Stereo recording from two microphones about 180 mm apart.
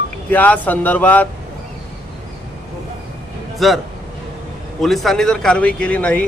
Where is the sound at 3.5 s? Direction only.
Centre (ahead or behind).